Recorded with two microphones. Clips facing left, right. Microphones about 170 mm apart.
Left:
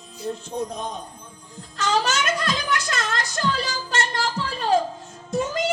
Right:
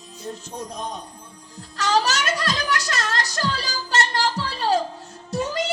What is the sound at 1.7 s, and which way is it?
Music, 40° right (ahead or behind).